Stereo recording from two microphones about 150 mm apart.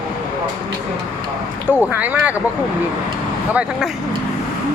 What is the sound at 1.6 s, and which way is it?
Speech, 10° right (ahead or behind).